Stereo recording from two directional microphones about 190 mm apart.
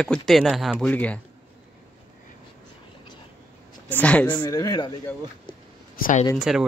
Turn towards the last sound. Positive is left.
turn(degrees=0)  # may be behind; listen again after turning